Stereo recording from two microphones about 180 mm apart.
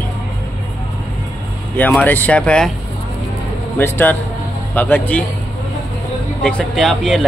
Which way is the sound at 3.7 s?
10° left (ahead or behind).